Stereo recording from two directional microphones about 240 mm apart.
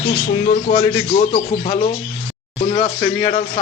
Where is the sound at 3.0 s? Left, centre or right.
Centre.